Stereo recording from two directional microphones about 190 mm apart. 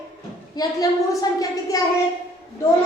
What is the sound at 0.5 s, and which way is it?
A woman's voice, 20° left (ahead or behind).